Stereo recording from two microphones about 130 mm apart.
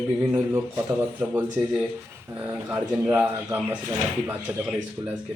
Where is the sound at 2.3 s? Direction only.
15° right (ahead or behind).